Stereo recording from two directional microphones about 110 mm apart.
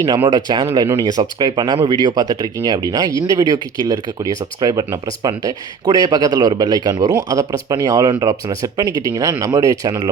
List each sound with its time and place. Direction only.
0.3 s speech: 40° right (ahead or behind)